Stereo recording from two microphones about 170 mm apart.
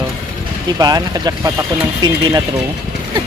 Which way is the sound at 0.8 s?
25° right (ahead or behind).